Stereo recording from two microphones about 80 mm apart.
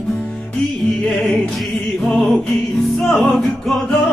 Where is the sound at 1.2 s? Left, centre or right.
Centre.